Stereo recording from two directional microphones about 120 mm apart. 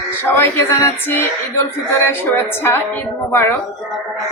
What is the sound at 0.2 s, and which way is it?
Speech, 20° left (ahead or behind).